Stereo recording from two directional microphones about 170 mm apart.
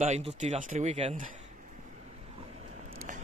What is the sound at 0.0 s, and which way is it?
Speech, 45° right (ahead or behind).